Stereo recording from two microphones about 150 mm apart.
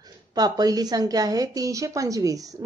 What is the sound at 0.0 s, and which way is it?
A woman's voice, 25° right (ahead or behind).